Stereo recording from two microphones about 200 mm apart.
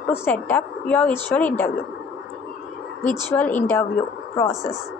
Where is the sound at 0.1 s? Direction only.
10° left (ahead or behind).